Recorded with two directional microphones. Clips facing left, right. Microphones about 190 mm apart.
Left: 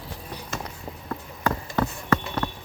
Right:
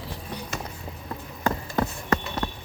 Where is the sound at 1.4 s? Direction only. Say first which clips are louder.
Even; 15° right (ahead or behind).